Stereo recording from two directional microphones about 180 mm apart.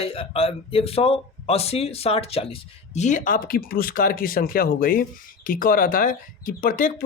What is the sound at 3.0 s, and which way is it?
Speech, 45° left (ahead or behind).